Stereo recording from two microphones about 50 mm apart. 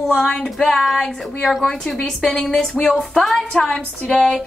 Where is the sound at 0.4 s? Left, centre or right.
Centre.